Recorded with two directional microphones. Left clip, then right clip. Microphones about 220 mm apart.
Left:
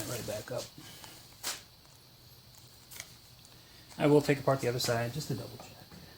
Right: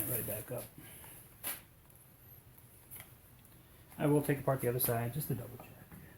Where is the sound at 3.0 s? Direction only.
40° left (ahead or behind).